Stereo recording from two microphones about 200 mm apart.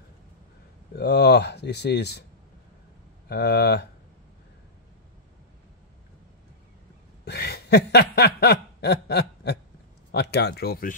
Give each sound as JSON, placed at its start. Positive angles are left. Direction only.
{"t": 0.9, "sound": "speech", "side_deg": 55}
{"t": 3.3, "sound": "speech", "side_deg": 55}
{"t": 7.2, "sound": "a sound", "side_deg": 55}
{"t": 10.1, "sound": "speech", "side_deg": 55}